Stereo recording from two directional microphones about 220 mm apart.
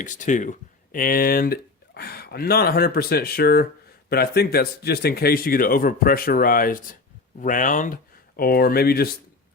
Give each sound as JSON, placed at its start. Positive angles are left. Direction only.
{"t": 0.0, "sound": "speech", "side_deg": 35}